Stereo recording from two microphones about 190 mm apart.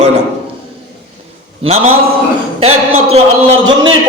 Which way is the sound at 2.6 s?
35° right (ahead or behind).